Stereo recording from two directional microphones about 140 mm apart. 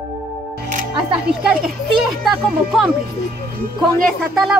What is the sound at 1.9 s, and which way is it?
Speech, centre (ahead or behind).